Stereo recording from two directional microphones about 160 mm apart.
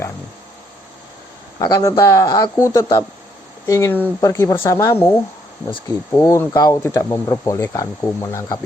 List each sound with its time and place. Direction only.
1.5 s speech: 25° left (ahead or behind)